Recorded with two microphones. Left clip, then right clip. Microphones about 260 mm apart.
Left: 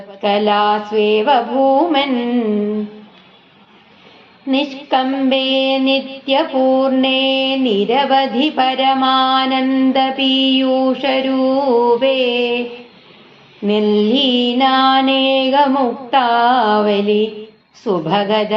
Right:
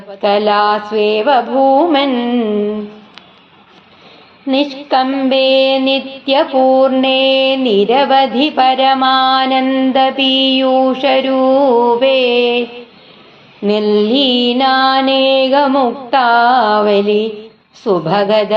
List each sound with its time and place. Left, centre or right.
0.2 s child singing: right
4.4 s child singing: right
13.7 s child singing: right